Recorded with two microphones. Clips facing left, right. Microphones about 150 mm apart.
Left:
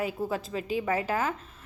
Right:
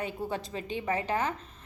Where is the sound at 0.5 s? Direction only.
30° right (ahead or behind).